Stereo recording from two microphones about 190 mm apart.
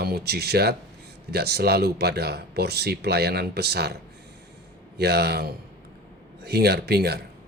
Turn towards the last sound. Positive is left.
turn(degrees=-55)  # may be behind; listen again after turning